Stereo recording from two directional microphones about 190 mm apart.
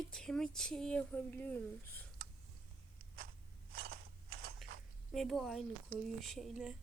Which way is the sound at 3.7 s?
55° right (ahead or behind).